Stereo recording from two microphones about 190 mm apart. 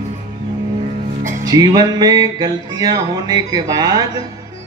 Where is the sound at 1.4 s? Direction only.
20° right (ahead or behind).